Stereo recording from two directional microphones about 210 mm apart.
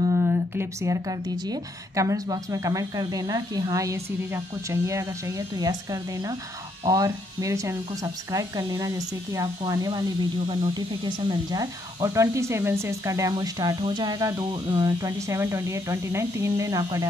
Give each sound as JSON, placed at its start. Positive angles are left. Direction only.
{"t": 0.0, "sound": "speech", "side_deg": -10}